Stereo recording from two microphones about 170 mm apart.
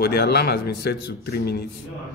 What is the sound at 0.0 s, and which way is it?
Speech, 70° left (ahead or behind).